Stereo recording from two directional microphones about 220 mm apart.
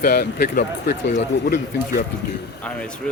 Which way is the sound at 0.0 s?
45° left (ahead or behind).